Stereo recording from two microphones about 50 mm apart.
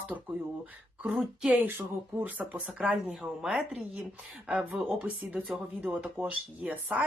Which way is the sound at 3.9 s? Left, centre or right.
Right.